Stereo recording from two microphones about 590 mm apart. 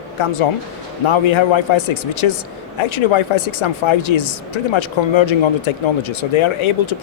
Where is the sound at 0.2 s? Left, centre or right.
Left.